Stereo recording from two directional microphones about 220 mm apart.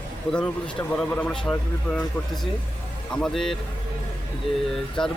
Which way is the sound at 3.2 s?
Centre (ahead or behind).